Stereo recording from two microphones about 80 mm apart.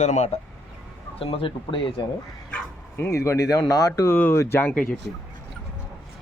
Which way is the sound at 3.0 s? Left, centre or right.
Left.